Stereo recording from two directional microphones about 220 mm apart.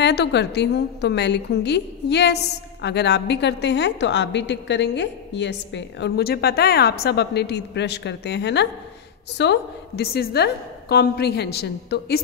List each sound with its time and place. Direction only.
0.0 s a woman's voice: 50° left (ahead or behind)